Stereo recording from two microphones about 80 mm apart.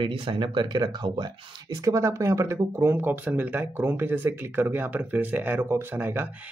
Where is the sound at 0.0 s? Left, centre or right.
Right.